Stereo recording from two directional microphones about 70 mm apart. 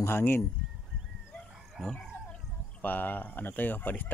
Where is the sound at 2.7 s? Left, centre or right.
Left.